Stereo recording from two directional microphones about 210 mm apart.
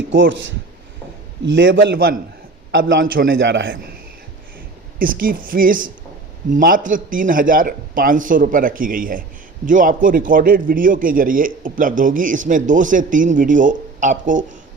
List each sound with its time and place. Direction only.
0.1 s speech: 60° right (ahead or behind)
1.5 s a man's voice: 60° right (ahead or behind)
2.7 s a man's voice: 60° right (ahead or behind)
3.1 s a man's voice: 45° right (ahead or behind); by 3.8 s 60° right (ahead or behind)
4.9 s a man's voice: 40° right (ahead or behind)